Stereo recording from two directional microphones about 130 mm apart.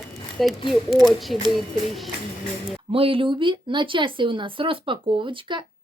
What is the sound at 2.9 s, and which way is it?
Speech, 45° right (ahead or behind).